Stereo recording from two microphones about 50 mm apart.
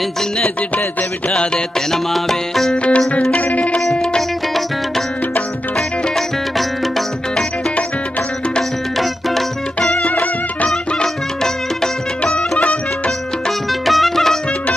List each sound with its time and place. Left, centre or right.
1.3 s music: centre
2.7 s music: left
9.8 s music: left
13.8 s music: centre